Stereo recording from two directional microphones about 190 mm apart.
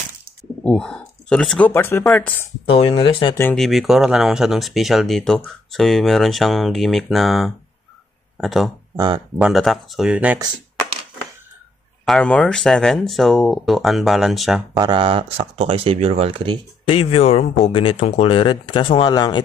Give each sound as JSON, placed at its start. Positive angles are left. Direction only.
{"t": 0.7, "sound": "speech", "side_deg": 5}
{"t": 2.6, "sound": "speech", "side_deg": 30}
{"t": 3.5, "sound": "speech", "side_deg": 0}
{"t": 8.9, "sound": "speech", "side_deg": -20}
{"t": 9.4, "sound": "speech", "side_deg": 0}
{"t": 12.0, "sound": "speech", "side_deg": 5}
{"t": 14.7, "sound": "speech", "side_deg": -20}
{"t": 16.9, "sound": "speech", "side_deg": 30}